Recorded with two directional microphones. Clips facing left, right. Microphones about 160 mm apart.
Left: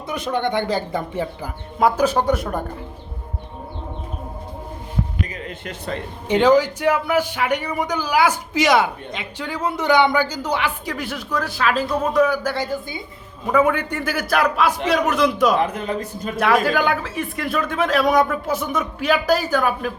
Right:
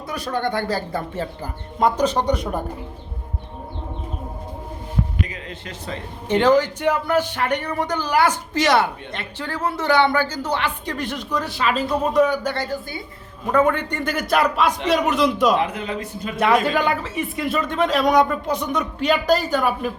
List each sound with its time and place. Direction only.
0.1 s a man's voice: 20° left (ahead or behind); by 2.6 s centre (ahead or behind)
5.3 s music: 55° left (ahead or behind)
6.2 s a man's voice: 15° left (ahead or behind)
15.6 s a man's voice: 45° left (ahead or behind)
16.3 s speech: centre (ahead or behind)